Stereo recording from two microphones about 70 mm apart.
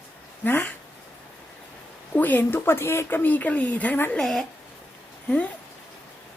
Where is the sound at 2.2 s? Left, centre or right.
Left.